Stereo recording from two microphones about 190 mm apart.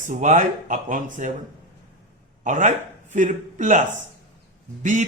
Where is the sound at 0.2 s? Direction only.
40° right (ahead or behind).